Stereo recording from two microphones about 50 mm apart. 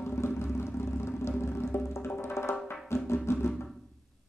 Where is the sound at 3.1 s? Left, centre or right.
Left.